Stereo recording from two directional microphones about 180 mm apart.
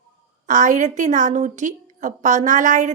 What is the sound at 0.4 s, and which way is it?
A woman's voice, 45° right (ahead or behind).